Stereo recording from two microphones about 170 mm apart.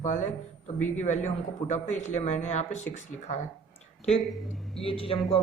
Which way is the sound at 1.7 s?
45° left (ahead or behind).